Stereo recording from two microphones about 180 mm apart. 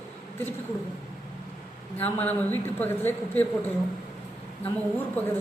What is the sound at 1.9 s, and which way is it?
A man's voice, 10° left (ahead or behind).